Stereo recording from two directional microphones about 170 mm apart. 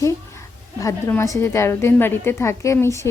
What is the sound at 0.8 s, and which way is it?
A woman's voice, 15° left (ahead or behind).